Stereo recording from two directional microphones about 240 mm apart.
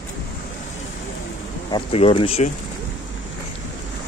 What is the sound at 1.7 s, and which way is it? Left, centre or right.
Speech, left.